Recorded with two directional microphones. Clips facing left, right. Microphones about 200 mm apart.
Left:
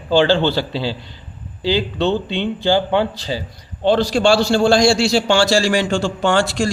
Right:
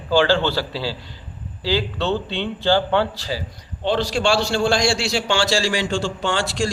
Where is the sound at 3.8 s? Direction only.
40° left (ahead or behind).